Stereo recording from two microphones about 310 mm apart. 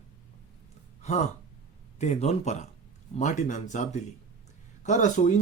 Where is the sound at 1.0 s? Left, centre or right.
Left.